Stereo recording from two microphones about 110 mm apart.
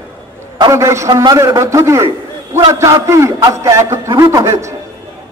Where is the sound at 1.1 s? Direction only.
45° right (ahead or behind).